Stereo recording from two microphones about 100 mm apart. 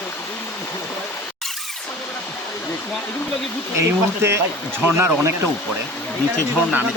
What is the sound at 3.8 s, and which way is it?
Speech, 25° right (ahead or behind).